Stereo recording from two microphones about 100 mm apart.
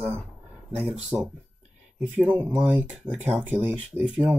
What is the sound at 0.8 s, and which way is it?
Speech, 10° right (ahead or behind).